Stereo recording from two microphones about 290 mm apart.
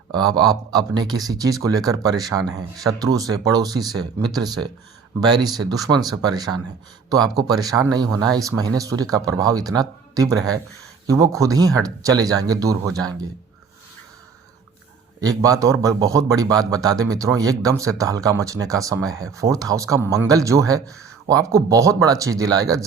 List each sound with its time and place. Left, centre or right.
0.1 s a man's voice: centre
15.2 s a man's voice: centre